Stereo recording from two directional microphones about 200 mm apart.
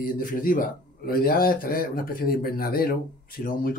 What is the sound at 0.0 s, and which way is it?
Speech, 45° left (ahead or behind).